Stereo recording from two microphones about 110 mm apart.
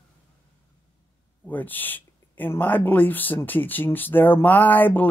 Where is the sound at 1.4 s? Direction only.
15° left (ahead or behind).